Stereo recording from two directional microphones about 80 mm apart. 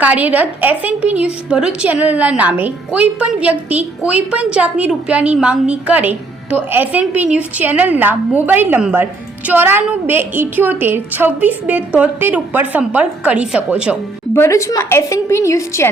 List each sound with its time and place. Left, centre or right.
0.0 s a woman's voice: centre
14.3 s a woman's voice: left